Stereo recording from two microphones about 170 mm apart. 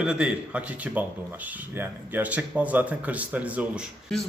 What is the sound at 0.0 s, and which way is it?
A man's voice, 5° right (ahead or behind).